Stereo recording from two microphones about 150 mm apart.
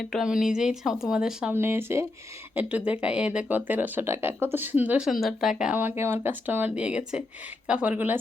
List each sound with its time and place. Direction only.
0.1 s speech: 5° right (ahead or behind)
1.5 s speech: 15° right (ahead or behind)